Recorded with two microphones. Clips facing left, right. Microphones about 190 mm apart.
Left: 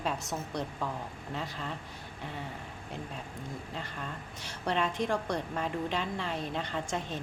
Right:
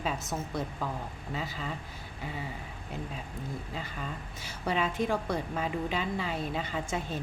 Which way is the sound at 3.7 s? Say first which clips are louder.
Right 1 dB; 5° right (ahead or behind).